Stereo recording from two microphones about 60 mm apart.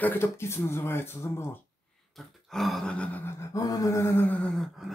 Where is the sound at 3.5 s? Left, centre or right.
Left.